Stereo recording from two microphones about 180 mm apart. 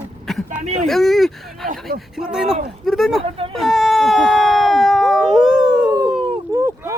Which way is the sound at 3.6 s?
Centre (ahead or behind).